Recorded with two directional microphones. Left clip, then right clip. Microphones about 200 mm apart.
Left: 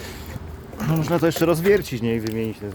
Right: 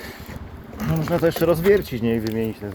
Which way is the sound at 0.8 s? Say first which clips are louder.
Even; 35° left (ahead or behind).